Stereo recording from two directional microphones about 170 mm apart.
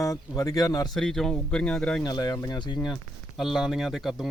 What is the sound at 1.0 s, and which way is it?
Speech, 5° left (ahead or behind).